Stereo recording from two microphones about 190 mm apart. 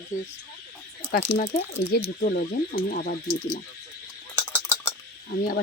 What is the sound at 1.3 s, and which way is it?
Speech, 40° left (ahead or behind).